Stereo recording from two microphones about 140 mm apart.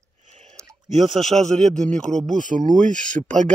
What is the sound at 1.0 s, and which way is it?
Speech, centre (ahead or behind).